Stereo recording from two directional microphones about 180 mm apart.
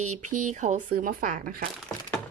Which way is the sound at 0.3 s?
45° right (ahead or behind).